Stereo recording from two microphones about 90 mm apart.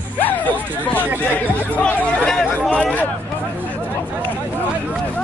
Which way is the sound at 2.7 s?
15° left (ahead or behind).